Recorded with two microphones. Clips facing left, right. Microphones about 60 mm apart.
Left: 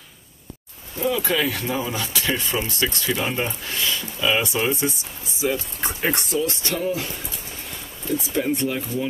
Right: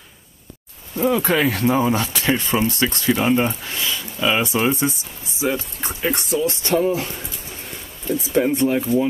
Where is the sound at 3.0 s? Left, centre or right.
Centre.